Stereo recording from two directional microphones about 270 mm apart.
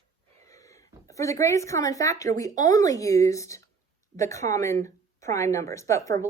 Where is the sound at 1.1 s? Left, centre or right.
Centre.